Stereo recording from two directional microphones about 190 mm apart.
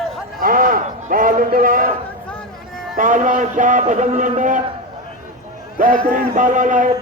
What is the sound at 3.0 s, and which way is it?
A man's voice, 40° right (ahead or behind).